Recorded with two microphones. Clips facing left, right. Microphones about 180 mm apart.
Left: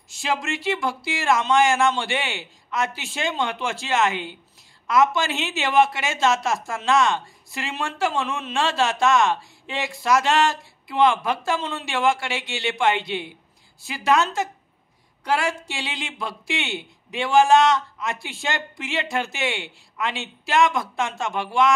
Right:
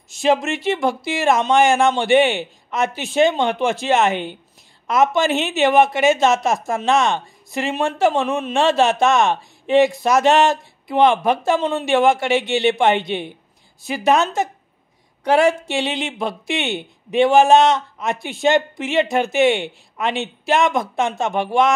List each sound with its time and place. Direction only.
0.1 s speech: 20° right (ahead or behind)
4.1 s speech: 60° right (ahead or behind)
4.8 s speech: 20° right (ahead or behind)